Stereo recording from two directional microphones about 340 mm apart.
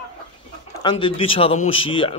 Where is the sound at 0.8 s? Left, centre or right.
Centre.